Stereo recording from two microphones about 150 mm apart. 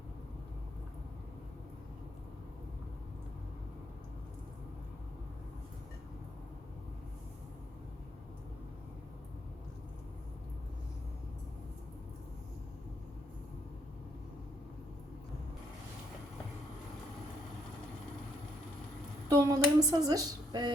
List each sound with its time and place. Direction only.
19.3 s speech: 25° right (ahead or behind)